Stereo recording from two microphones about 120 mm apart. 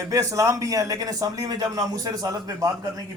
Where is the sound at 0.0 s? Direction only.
25° right (ahead or behind).